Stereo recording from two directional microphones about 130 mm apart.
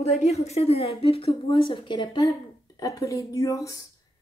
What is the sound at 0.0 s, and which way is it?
A woman's voice, 55° left (ahead or behind).